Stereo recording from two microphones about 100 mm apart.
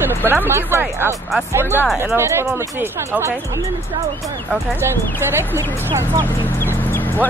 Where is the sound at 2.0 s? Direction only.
25° right (ahead or behind).